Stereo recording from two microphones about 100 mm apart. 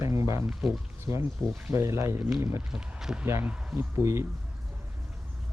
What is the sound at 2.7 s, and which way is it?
Speech, 5° right (ahead or behind).